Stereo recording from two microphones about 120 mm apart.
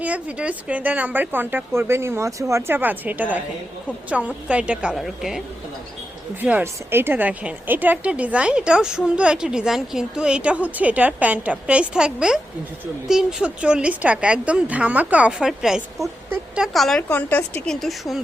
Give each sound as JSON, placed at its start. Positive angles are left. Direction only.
{"t": 0.0, "sound": "a woman's voice", "side_deg": -10}
{"t": 6.4, "sound": "a woman's voice", "side_deg": -15}
{"t": 17.0, "sound": "a woman's voice", "side_deg": 15}
{"t": 17.7, "sound": "a woman's voice", "side_deg": 0}